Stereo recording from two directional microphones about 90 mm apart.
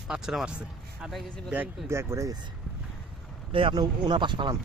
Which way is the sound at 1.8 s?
30° right (ahead or behind).